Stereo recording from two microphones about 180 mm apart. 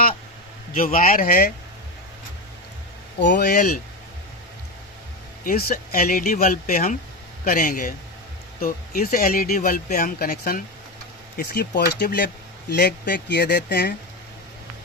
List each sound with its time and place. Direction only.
0.7 s speech: 50° left (ahead or behind)
3.3 s speech: 50° left (ahead or behind)
5.5 s speech: 55° left (ahead or behind)